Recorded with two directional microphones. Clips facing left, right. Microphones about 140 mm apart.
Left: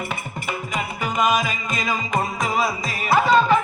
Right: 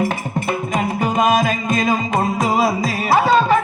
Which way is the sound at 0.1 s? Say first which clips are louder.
Right 7 dB; 40° right (ahead or behind).